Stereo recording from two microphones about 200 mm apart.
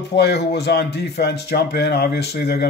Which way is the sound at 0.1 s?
55° left (ahead or behind).